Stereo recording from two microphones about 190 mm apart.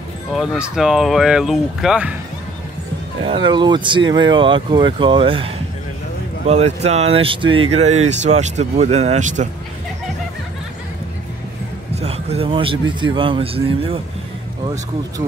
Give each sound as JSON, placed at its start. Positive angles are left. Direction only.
{"t": 0.4, "sound": "speech", "side_deg": -5}
{"t": 3.3, "sound": "speech", "side_deg": -25}
{"t": 11.9, "sound": "a man's voice", "side_deg": -35}